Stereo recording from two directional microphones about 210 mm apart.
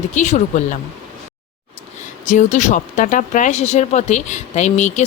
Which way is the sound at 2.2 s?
35° left (ahead or behind).